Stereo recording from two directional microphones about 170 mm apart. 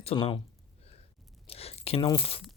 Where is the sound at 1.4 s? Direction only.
35° left (ahead or behind).